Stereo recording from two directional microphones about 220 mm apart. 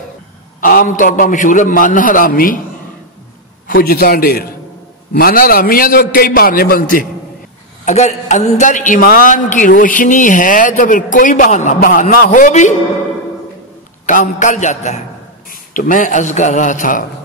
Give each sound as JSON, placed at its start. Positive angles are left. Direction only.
{"t": 0.6, "sound": "a man's voice", "side_deg": 40}
{"t": 3.6, "sound": "a man's voice", "side_deg": 40}
{"t": 14.0, "sound": "a man's voice", "side_deg": 35}